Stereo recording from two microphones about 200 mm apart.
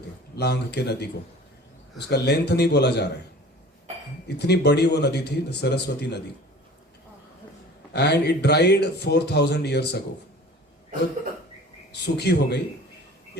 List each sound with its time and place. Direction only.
0.3 s speech: 55° left (ahead or behind)
4.3 s speech: 55° left (ahead or behind)
7.9 s speech: 55° left (ahead or behind)
11.9 s speech: 55° left (ahead or behind)